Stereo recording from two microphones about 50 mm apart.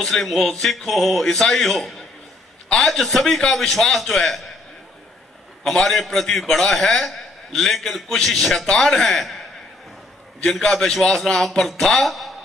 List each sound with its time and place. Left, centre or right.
0.0 s a man's voice: centre
5.6 s a man's voice: centre
10.6 s a man's voice: centre